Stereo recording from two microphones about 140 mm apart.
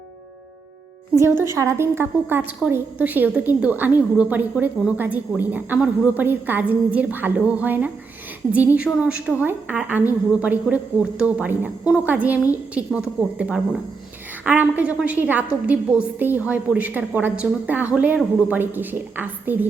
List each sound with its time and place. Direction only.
1.1 s a woman's voice: 20° right (ahead or behind)